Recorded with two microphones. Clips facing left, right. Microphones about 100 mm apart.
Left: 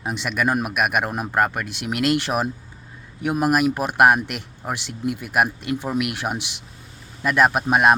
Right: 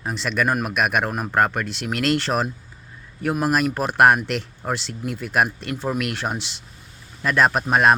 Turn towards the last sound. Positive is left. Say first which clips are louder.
# left 1 dB
turn(degrees=10)  # may be behind; listen again after turning